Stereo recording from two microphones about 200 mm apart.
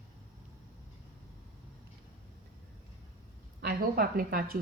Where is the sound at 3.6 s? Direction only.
45° right (ahead or behind).